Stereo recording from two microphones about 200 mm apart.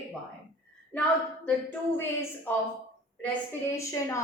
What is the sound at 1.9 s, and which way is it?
Speech, 10° left (ahead or behind).